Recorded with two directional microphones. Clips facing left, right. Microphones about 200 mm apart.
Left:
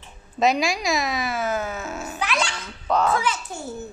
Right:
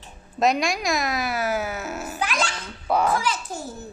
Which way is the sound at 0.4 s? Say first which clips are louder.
Left 1 dB; centre (ahead or behind).